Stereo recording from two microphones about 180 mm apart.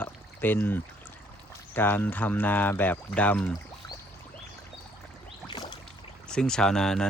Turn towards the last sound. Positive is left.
turn(degrees=5)  # may be behind; listen again after turning